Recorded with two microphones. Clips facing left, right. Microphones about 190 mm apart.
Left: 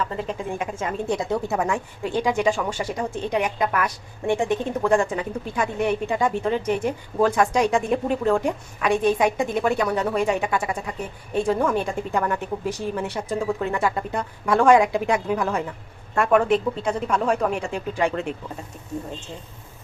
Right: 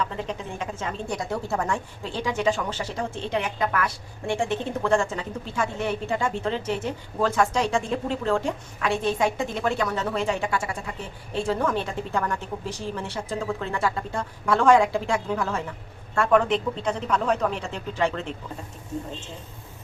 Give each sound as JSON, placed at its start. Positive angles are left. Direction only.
{"t": 0.0, "sound": "a woman's voice", "side_deg": 5}
{"t": 1.0, "sound": "a woman's voice", "side_deg": 20}